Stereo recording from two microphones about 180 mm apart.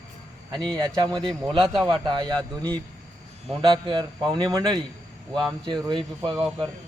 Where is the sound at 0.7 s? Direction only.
25° right (ahead or behind).